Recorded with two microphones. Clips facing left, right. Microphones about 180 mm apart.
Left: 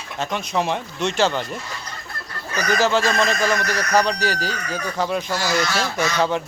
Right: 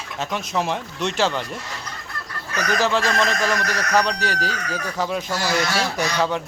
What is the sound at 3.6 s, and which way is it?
Speech, 30° left (ahead or behind).